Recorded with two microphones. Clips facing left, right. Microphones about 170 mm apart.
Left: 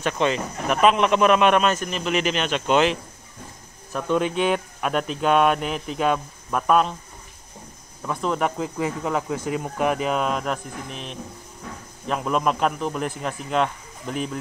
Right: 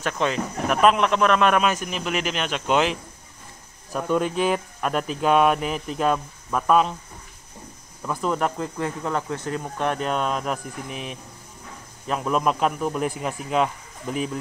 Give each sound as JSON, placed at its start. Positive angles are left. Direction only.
{"t": 0.0, "sound": "speech", "side_deg": 0}
{"t": 1.5, "sound": "speech", "side_deg": -10}
{"t": 8.0, "sound": "speech", "side_deg": -5}